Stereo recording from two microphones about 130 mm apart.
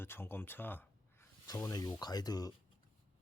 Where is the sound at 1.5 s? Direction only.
30° left (ahead or behind).